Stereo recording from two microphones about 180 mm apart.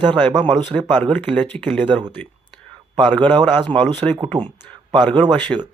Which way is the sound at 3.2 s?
25° right (ahead or behind).